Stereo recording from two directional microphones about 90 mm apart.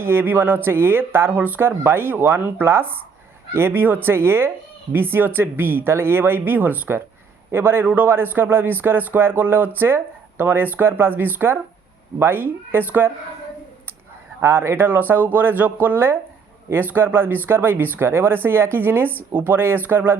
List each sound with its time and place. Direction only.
0.0 s a man's voice: 25° right (ahead or behind)
14.4 s a man's voice: 30° right (ahead or behind)